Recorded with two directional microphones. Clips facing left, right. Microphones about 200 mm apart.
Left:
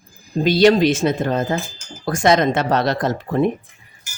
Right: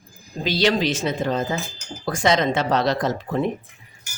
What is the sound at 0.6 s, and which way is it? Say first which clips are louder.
Speech: left 7 dB; 55° left (ahead or behind).